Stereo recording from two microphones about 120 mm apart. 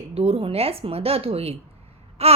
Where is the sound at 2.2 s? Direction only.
60° right (ahead or behind).